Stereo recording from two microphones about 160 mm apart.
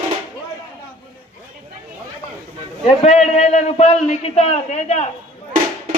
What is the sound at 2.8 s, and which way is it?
A man's voice, 40° left (ahead or behind).